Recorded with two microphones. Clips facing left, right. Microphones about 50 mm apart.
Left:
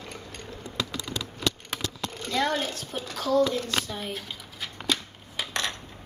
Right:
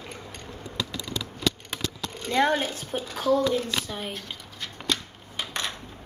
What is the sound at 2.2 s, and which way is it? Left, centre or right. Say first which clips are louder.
A woman's voice: right 4 dB; right.